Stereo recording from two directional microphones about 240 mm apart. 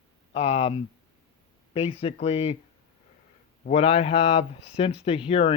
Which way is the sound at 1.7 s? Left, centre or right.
Left.